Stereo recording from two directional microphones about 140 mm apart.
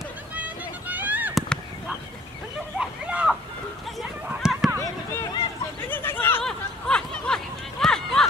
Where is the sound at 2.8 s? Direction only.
5° right (ahead or behind).